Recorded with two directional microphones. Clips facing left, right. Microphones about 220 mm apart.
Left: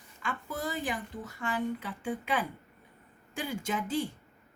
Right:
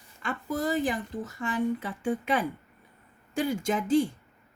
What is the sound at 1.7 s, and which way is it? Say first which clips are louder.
Speech: right 5 dB; 45° right (ahead or behind).